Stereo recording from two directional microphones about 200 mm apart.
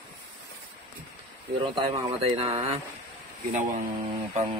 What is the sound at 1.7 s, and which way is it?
Speech, 25° right (ahead or behind).